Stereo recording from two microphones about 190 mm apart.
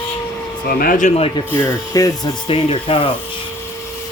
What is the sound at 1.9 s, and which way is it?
Speech, 20° left (ahead or behind).